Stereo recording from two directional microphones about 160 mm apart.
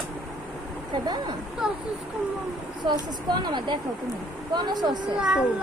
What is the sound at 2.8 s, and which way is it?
Speech, 25° right (ahead or behind).